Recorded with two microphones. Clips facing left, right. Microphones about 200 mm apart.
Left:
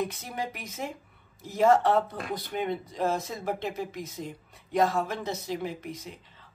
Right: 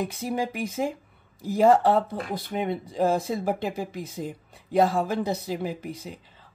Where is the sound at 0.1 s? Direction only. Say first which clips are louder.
Right 7 dB; 30° right (ahead or behind).